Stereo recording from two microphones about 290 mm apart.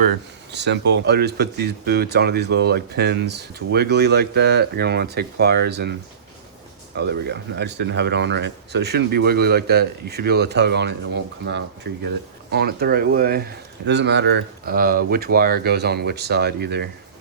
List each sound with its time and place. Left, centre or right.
0.5 s speech: right
6.9 s speech: right